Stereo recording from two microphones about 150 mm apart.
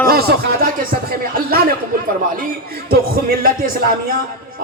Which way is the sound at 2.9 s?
80° right.